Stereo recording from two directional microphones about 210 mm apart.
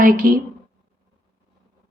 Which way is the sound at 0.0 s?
40° right (ahead or behind).